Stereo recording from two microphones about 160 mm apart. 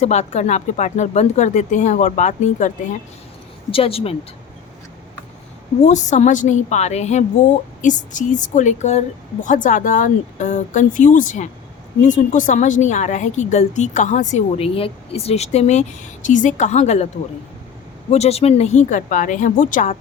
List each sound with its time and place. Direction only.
0.0 s a woman's voice: 45° left (ahead or behind)
3.7 s speech: 35° left (ahead or behind)
5.9 s a woman's voice: 50° left (ahead or behind)
18.1 s a woman's voice: 40° left (ahead or behind)